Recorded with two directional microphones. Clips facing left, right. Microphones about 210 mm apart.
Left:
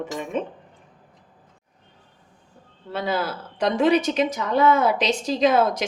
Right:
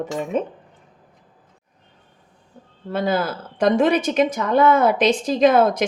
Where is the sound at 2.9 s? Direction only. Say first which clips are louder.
Right 4 dB; 50° right (ahead or behind).